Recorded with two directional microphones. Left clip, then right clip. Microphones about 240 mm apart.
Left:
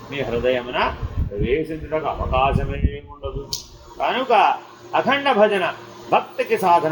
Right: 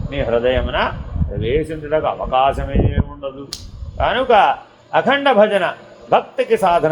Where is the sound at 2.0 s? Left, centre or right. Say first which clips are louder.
Right 3 dB; right.